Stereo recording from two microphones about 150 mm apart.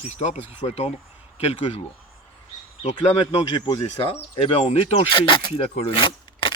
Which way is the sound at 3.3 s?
30° left (ahead or behind).